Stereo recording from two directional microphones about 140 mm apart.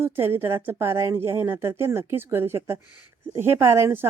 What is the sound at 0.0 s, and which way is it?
A woman's voice, 15° right (ahead or behind).